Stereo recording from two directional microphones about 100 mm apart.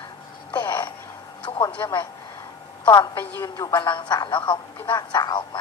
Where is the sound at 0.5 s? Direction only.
45° left (ahead or behind).